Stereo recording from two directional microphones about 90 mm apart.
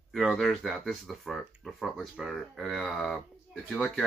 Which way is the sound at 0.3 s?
Centre (ahead or behind).